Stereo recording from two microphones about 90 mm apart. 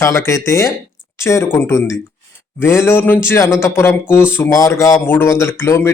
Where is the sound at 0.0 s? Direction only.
35° left (ahead or behind).